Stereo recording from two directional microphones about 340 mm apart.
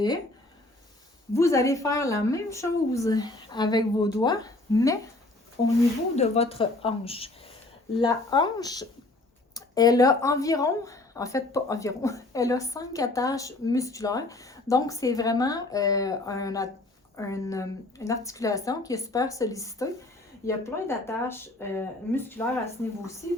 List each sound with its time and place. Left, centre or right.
1.3 s a woman's voice: centre
6.1 s a woman's voice: centre